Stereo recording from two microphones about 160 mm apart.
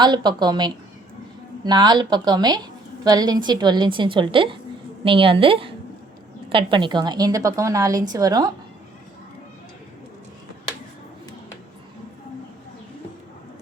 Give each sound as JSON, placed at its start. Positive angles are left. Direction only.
{"t": 0.0, "sound": "a woman's voice", "side_deg": -25}